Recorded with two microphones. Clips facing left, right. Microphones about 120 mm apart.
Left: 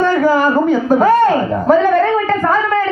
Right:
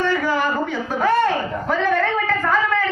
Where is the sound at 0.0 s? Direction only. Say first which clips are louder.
Left 8 dB; 40° left (ahead or behind).